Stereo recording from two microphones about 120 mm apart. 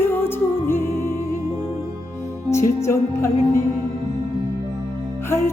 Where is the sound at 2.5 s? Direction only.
25° left (ahead or behind).